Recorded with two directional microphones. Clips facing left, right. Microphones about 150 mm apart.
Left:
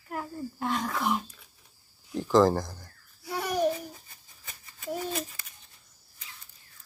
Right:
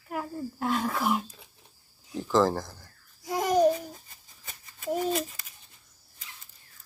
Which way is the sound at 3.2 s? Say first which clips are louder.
Right 5 dB; 15° right (ahead or behind).